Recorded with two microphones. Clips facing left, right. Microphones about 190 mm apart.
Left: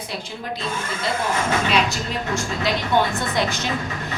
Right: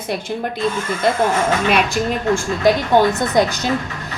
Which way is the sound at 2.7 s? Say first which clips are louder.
Right 8 dB; 45° right (ahead or behind).